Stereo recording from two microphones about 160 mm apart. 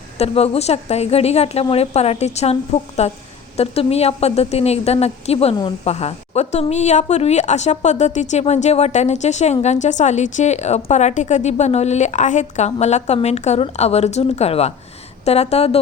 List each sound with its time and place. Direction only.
0.2 s a woman's voice: 40° left (ahead or behind)